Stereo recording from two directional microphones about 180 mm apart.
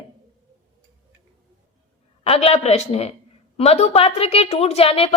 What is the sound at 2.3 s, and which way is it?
A woman's voice, 35° left (ahead or behind).